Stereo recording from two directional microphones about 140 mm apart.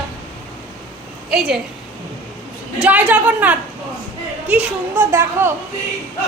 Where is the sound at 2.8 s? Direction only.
10° right (ahead or behind).